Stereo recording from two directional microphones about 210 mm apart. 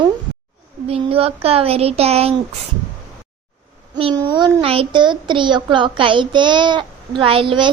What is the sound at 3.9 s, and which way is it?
Speech, 20° right (ahead or behind).